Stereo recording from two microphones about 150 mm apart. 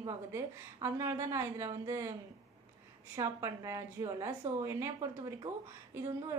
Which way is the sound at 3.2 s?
20° right (ahead or behind).